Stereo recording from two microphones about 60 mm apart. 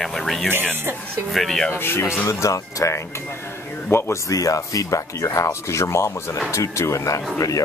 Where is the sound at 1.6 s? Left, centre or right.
Left.